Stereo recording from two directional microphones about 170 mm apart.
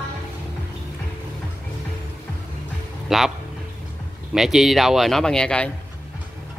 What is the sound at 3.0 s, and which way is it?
Speech, centre (ahead or behind).